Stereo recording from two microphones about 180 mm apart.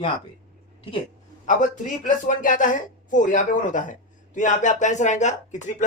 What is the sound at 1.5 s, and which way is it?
Speech, 45° left (ahead or behind).